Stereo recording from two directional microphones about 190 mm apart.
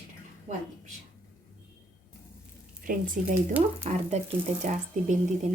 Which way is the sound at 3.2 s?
45° right (ahead or behind).